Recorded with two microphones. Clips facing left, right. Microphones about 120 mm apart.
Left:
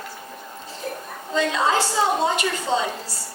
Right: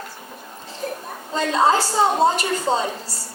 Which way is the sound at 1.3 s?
40° right (ahead or behind).